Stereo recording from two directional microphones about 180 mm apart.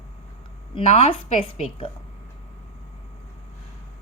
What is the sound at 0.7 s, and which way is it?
A woman's voice, 35° left (ahead or behind).